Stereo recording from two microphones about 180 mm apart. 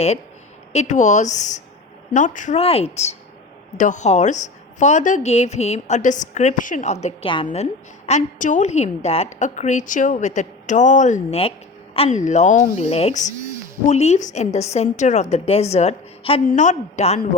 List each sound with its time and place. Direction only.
0.7 s a woman's voice: 40° left (ahead or behind)